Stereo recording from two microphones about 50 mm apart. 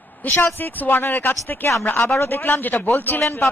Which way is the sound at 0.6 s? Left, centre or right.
Left.